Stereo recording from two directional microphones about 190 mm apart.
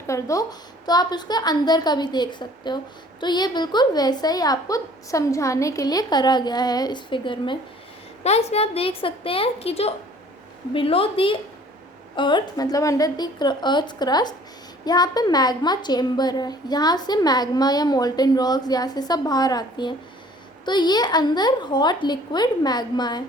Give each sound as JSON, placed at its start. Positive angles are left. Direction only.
{"t": 0.1, "sound": "a woman's voice", "side_deg": 15}